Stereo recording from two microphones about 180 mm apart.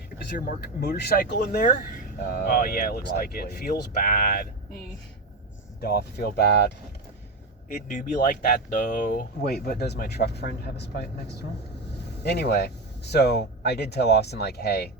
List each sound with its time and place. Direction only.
0.3 s speech: 55° left (ahead or behind)
5.8 s speech: 60° left (ahead or behind)
7.7 s speech: 45° left (ahead or behind); by 14.8 s 60° left (ahead or behind)